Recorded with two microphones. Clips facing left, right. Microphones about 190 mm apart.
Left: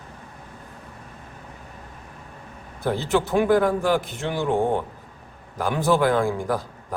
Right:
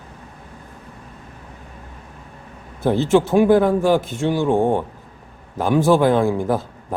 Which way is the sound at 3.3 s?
15° right (ahead or behind).